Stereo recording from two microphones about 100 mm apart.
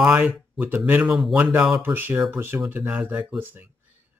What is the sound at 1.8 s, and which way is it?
Speech, 20° right (ahead or behind).